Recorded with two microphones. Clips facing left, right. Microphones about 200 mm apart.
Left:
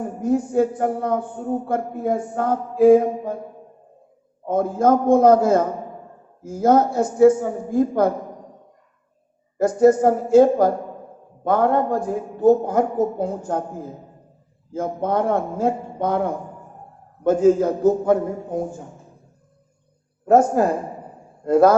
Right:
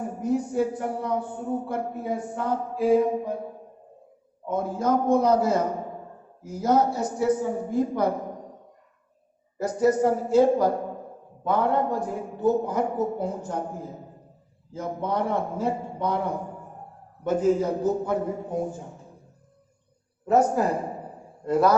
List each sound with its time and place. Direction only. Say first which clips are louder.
0.2 s a woman's voice: left 6 dB; 50° left (ahead or behind)
4.4 s a woman's voice: left 7 dB; 50° left (ahead or behind)
9.6 s a woman's voice: left 7 dB; 50° left (ahead or behind)
14.7 s a woman's voice: left 6 dB; 50° left (ahead or behind)
20.2 s a woman's voice: left 5 dB; 50° left (ahead or behind)